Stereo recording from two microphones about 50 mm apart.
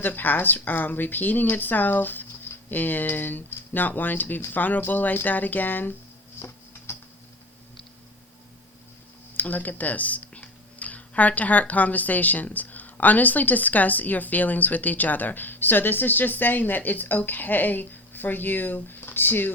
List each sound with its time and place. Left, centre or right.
0.0 s speech: left
6.9 s a sound: left
9.4 s speech: left